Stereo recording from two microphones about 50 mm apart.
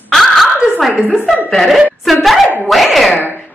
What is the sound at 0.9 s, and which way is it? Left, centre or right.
Speech, centre.